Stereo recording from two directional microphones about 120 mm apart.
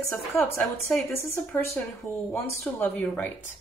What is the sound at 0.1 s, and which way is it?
Speech, 15° left (ahead or behind).